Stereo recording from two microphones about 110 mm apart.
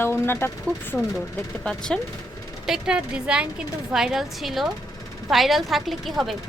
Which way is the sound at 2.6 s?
5° right (ahead or behind).